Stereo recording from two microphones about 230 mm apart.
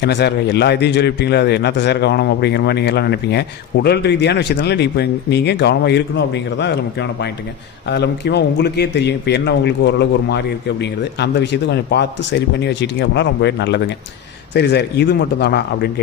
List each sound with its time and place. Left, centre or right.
0.0 s a man's voice: left